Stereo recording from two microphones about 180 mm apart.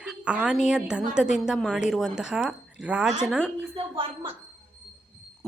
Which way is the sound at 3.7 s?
30° right (ahead or behind).